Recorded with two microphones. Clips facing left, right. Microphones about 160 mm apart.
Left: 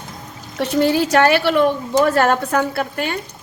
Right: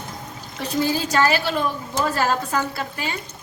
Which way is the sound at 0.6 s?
75° left (ahead or behind).